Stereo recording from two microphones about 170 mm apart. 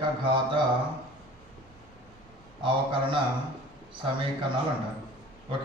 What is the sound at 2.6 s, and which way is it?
Speech, 30° right (ahead or behind).